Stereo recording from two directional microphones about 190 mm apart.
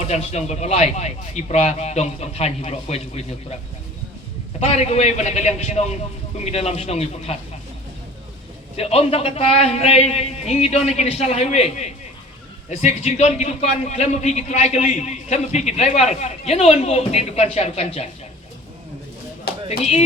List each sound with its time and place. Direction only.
0.0 s a man's voice: 35° left (ahead or behind)
4.6 s a man's voice: 35° left (ahead or behind)
8.7 s a man's voice: 30° left (ahead or behind)
19.6 s speech: 30° left (ahead or behind)